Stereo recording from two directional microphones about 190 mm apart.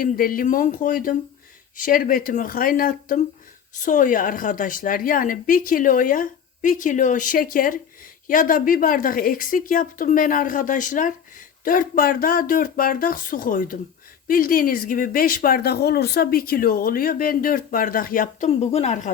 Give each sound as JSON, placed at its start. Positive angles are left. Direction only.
{"t": 0.0, "sound": "a woman's voice", "side_deg": 50}